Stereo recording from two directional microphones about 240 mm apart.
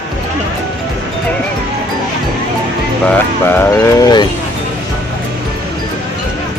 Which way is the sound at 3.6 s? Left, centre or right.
Centre.